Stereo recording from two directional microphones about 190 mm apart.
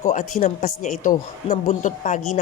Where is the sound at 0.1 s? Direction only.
40° left (ahead or behind).